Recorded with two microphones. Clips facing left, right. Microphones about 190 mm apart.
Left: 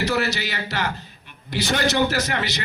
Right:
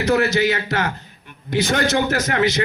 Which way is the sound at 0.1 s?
55° right (ahead or behind).